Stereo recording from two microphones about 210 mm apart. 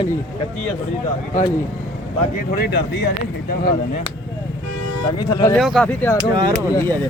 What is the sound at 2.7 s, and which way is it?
Speech, 50° left (ahead or behind).